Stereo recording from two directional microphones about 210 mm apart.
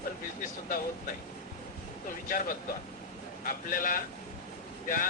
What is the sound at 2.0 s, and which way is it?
Speech, 40° left (ahead or behind).